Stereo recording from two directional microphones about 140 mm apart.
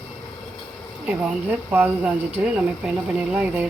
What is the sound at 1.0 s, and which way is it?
Speech, 10° right (ahead or behind).